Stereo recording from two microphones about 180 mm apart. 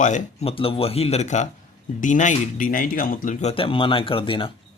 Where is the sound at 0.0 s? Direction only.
40° left (ahead or behind).